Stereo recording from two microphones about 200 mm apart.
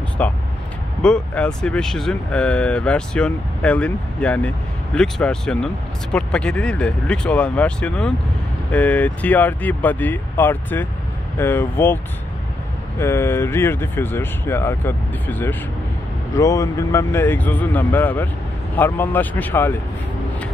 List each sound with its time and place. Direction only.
0.2 s speech: 5° left (ahead or behind)
13.0 s speech: 15° left (ahead or behind)